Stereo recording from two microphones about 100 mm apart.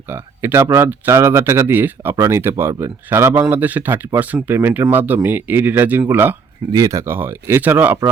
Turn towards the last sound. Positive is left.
turn(degrees=-20)  # may be behind; listen again after turning